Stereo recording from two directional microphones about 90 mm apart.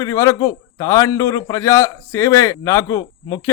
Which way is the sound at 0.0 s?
40° left (ahead or behind).